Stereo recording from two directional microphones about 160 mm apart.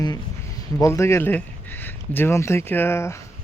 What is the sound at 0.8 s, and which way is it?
Speech, 15° left (ahead or behind).